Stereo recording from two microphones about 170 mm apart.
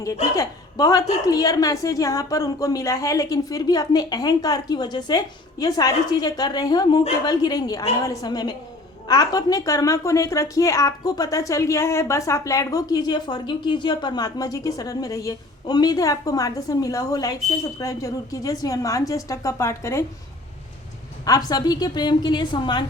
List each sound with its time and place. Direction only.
0.3 s a woman's voice: 20° left (ahead or behind)
21.2 s a woman's voice: 20° left (ahead or behind)